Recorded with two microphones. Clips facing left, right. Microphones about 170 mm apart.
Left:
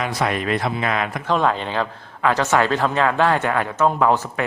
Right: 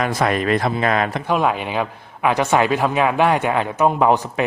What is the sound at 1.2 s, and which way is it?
A man's voice, 10° right (ahead or behind).